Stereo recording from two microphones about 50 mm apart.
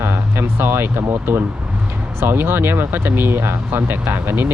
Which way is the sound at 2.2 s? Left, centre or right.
Right.